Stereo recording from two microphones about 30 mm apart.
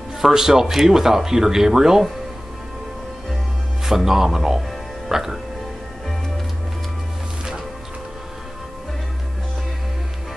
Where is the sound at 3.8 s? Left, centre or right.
Centre.